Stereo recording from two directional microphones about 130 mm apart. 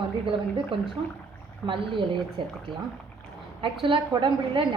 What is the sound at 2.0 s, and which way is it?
Speech, centre (ahead or behind).